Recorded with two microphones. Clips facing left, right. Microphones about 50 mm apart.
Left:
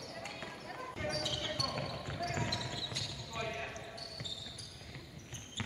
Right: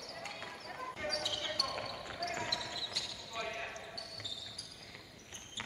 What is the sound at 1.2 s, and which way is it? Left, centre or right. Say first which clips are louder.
Basketball bounce: even; centre.